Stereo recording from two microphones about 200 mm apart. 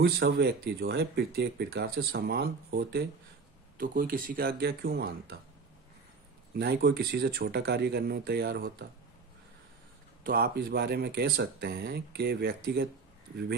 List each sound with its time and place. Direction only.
0.2 s speech: 55° right (ahead or behind)
6.5 s speech: 50° right (ahead or behind)
10.2 s speech: 50° right (ahead or behind)